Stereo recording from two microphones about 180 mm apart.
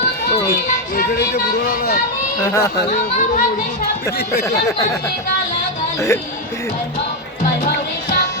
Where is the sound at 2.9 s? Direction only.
40° left (ahead or behind).